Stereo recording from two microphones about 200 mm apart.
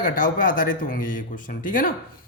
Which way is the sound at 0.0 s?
40° left (ahead or behind).